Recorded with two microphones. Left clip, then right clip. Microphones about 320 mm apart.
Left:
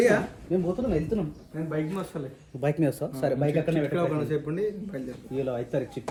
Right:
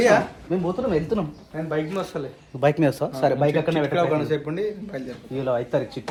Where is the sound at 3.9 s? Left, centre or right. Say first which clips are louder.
Right 6 dB; centre.